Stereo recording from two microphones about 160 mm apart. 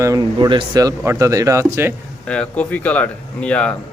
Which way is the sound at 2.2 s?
5° left (ahead or behind).